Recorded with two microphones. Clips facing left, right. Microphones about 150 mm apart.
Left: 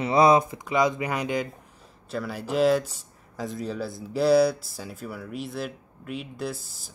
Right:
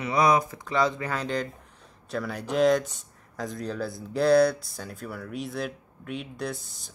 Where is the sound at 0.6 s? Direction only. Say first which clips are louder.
Left 2 dB; 15° left (ahead or behind).